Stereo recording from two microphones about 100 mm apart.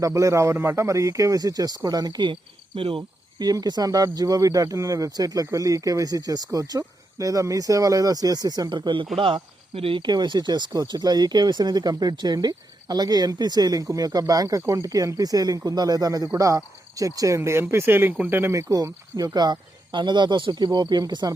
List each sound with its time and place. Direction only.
0.0 s speech: 35° right (ahead or behind); by 3.0 s 65° right (ahead or behind)
3.3 s speech: 40° right (ahead or behind)
9.1 s speech: 65° right (ahead or behind)
10.0 s speech: 45° right (ahead or behind); by 18.6 s 25° right (ahead or behind)
18.7 s speech: 40° right (ahead or behind)